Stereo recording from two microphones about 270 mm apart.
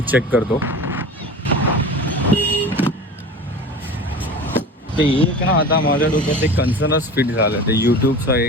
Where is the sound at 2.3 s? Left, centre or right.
Centre.